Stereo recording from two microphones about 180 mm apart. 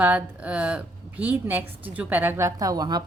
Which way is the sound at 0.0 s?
10° right (ahead or behind).